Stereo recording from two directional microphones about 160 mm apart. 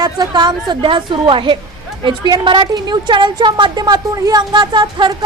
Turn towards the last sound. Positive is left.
turn(degrees=-30)  # may be behind; listen again after turning